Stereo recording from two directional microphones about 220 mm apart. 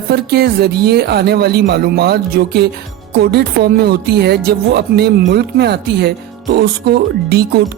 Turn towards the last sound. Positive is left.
turn(degrees=-45)  # may be behind; listen again after turning